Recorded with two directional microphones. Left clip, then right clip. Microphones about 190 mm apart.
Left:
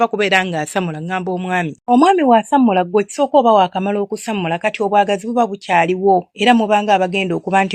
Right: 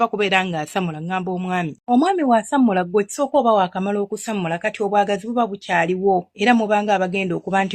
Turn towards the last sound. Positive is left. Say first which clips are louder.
# left 5 dB
turn(degrees=30)  # may be behind; listen again after turning